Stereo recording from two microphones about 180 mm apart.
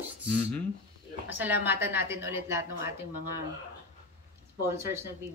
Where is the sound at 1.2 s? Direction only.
10° right (ahead or behind).